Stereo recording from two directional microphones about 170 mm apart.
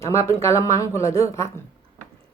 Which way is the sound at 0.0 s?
15° left (ahead or behind).